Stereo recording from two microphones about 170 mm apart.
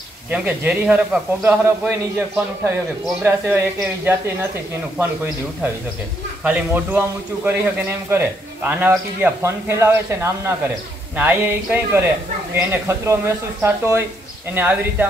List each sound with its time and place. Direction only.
0.3 s a man's voice: 10° right (ahead or behind)
4.9 s a man's voice: 10° right (ahead or behind)